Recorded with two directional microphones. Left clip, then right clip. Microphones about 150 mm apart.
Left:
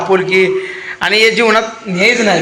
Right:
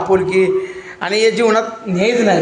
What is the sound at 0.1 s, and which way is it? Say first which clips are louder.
A man's voice: left 2 dB; 5° left (ahead or behind).